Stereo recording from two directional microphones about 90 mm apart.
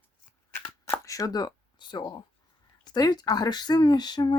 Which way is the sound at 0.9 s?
35° left (ahead or behind).